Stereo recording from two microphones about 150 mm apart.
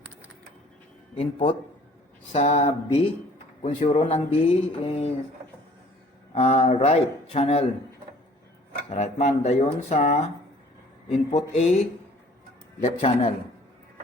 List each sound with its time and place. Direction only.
1.1 s speech: 40° left (ahead or behind)
6.3 s speech: 45° left (ahead or behind)
8.9 s speech: 50° left (ahead or behind)
13.0 s speech: 35° left (ahead or behind)